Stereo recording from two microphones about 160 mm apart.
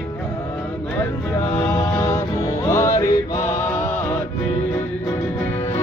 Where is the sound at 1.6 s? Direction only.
15° left (ahead or behind).